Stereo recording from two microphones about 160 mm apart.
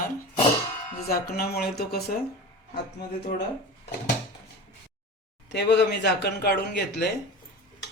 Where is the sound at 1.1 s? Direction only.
70° left (ahead or behind).